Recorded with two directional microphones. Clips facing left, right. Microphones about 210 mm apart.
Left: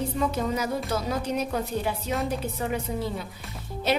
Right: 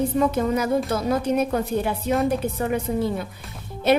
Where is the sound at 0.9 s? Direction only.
55° right (ahead or behind).